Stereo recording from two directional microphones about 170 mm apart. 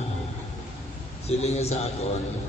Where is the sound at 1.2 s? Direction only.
40° left (ahead or behind).